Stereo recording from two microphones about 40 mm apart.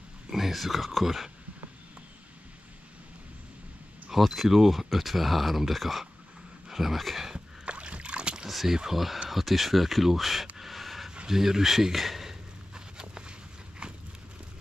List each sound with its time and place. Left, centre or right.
0.3 s speech: centre
4.1 s speech: centre
7.3 s rowboat: right
8.5 s speech: centre
10.6 s a sound: centre
11.2 s speech: centre
12.7 s a sound: right